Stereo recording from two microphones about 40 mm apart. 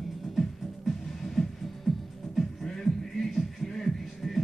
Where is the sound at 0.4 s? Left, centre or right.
Centre.